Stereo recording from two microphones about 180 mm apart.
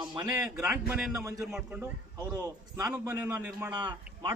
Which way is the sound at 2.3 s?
20° right (ahead or behind).